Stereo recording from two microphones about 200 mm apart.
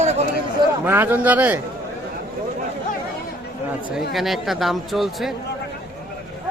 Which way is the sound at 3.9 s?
Centre (ahead or behind).